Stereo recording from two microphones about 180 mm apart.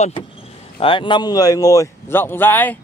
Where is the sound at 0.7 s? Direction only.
30° left (ahead or behind).